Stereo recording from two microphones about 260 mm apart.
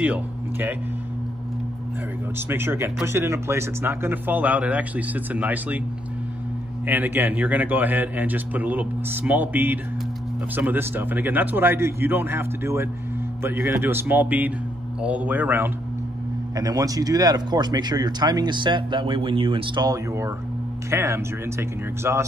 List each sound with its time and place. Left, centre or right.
0.0 s speech: centre
2.3 s speech: centre
6.9 s speech: centre